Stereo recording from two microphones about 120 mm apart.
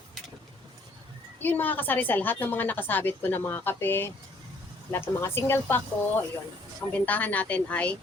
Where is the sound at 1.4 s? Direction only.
15° left (ahead or behind).